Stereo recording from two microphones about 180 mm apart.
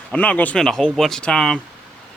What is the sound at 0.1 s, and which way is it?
Speech, 5° left (ahead or behind).